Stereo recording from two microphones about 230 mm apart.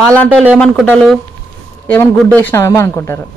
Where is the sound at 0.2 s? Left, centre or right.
Centre.